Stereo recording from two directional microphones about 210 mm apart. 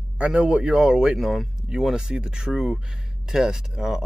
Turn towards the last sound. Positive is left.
turn(degrees=0)  # may be behind; listen again after turning